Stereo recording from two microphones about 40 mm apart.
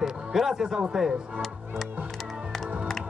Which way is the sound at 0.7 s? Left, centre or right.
Right.